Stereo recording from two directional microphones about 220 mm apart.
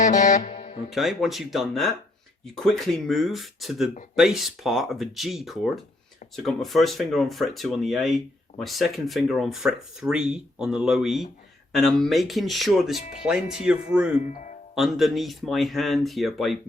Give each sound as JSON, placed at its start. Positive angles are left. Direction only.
{"t": 0.0, "sound": "music", "side_deg": 35}
{"t": 0.9, "sound": "speech", "side_deg": 0}